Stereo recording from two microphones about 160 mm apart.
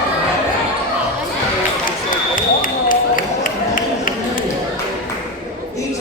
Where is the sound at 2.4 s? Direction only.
60° left (ahead or behind).